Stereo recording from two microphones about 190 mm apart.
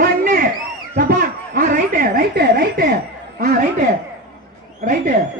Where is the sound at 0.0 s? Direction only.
45° right (ahead or behind).